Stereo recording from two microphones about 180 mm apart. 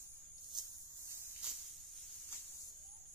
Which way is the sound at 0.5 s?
25° right (ahead or behind).